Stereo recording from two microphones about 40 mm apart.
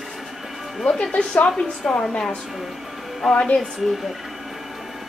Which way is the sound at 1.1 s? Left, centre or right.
Left.